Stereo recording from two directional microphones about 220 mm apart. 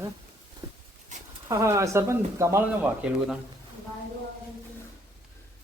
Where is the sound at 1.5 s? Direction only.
15° right (ahead or behind).